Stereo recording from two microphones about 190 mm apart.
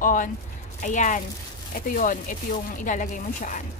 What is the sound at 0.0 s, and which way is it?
Speech, 45° left (ahead or behind).